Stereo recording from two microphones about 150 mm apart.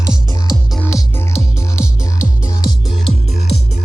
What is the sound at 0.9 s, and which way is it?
Music, 15° left (ahead or behind).